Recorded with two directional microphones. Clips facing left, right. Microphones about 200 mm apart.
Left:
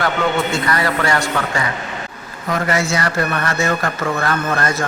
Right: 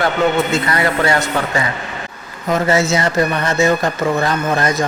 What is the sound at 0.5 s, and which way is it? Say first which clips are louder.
Speech: right 2 dB; 20° right (ahead or behind).